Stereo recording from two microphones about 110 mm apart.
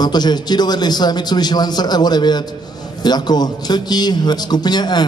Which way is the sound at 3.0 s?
40° left (ahead or behind).